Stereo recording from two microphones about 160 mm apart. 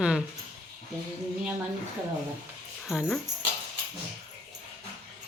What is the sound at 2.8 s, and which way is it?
Speech, centre (ahead or behind).